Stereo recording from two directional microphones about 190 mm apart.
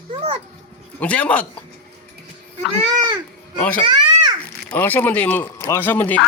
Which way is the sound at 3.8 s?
25° right (ahead or behind).